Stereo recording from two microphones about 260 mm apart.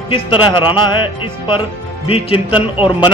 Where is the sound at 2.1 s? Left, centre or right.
Left.